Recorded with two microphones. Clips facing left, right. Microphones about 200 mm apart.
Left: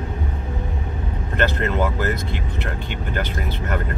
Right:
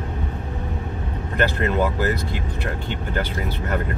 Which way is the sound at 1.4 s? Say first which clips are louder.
Even; 15° right (ahead or behind).